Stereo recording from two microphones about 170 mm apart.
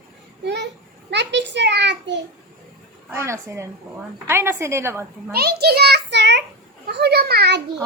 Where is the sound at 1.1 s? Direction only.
90° right.